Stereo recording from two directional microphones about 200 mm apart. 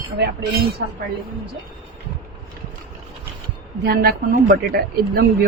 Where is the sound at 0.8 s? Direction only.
55° right (ahead or behind).